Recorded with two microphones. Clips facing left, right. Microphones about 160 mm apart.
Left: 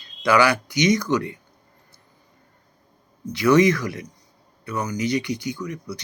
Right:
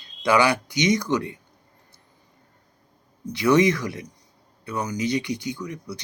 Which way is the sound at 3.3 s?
25° right (ahead or behind).